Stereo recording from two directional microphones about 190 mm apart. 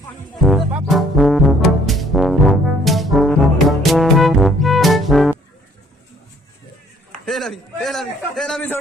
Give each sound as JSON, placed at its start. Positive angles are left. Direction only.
{"t": 0.5, "sound": "trombone", "side_deg": 0}
{"t": 2.8, "sound": "brass instrument", "side_deg": 0}
{"t": 7.2, "sound": "a sound", "side_deg": 0}